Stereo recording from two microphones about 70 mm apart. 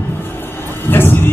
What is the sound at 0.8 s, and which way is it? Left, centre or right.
Vehicle, left.